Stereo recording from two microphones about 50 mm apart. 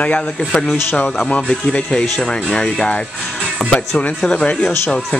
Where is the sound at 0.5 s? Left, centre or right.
Centre.